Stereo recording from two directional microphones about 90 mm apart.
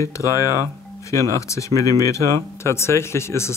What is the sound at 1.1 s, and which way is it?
Speech, 35° left (ahead or behind).